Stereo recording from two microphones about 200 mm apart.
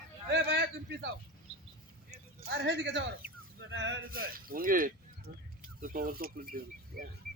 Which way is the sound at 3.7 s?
65° right (ahead or behind).